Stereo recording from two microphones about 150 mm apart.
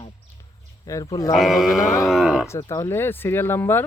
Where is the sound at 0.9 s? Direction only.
20° left (ahead or behind).